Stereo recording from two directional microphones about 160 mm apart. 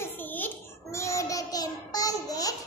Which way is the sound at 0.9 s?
20° left (ahead or behind).